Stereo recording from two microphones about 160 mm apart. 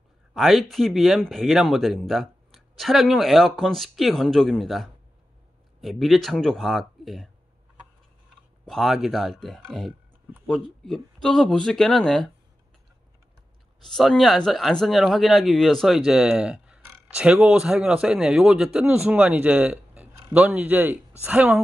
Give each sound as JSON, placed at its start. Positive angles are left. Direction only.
{"t": 0.3, "sound": "speech", "side_deg": 0}
{"t": 8.6, "sound": "speech", "side_deg": 0}
{"t": 13.9, "sound": "speech", "side_deg": 0}